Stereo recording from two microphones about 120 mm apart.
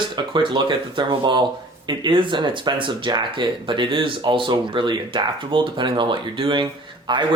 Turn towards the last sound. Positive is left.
turn(degrees=-40)  # may be behind; listen again after turning